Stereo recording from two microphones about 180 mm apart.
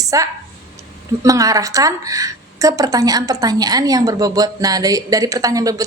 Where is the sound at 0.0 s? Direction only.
20° right (ahead or behind).